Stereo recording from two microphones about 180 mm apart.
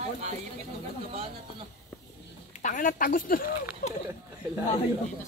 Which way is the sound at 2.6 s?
45° left (ahead or behind).